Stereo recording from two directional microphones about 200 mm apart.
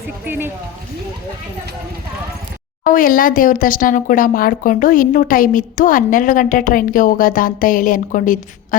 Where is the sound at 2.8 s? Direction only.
45° left (ahead or behind).